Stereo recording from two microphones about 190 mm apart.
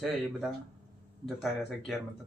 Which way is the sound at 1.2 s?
Centre (ahead or behind).